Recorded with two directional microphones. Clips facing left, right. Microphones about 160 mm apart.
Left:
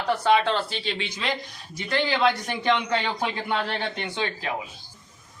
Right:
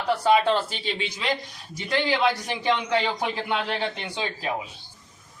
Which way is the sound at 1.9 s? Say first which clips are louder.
Even; 10° right (ahead or behind).